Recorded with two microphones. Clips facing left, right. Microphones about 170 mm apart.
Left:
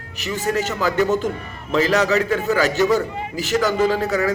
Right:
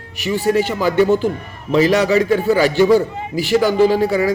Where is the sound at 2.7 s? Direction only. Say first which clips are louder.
Right 5 dB; 10° right (ahead or behind).